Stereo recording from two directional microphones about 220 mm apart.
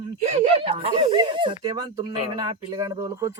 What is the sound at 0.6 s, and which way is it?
Speech, 20° right (ahead or behind).